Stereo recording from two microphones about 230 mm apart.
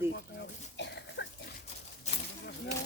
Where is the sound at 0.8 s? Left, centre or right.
Left.